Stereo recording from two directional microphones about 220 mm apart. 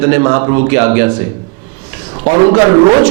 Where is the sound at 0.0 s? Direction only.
15° right (ahead or behind).